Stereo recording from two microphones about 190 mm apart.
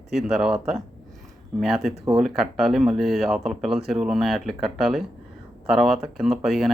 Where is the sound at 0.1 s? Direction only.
Centre (ahead or behind).